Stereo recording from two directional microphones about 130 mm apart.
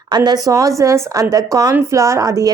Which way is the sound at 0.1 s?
30° right (ahead or behind).